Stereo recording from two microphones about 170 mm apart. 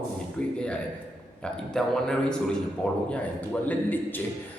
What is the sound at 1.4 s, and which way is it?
A man's voice, 5° left (ahead or behind).